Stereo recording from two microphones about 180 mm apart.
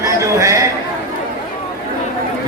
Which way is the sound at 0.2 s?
15° right (ahead or behind).